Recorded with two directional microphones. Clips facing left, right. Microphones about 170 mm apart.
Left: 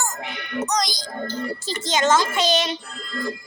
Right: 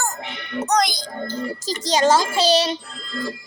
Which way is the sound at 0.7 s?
60° right (ahead or behind).